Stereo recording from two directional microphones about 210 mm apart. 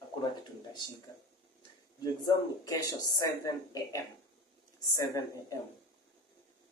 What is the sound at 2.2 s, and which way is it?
Speech, 15° left (ahead or behind).